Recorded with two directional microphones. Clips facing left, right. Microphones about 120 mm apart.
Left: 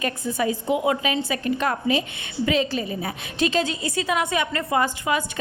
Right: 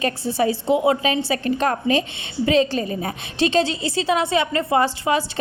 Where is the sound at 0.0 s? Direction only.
30° right (ahead or behind).